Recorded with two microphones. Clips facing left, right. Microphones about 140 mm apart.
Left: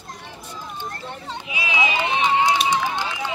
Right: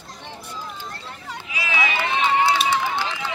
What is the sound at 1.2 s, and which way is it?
Run, 20° left (ahead or behind).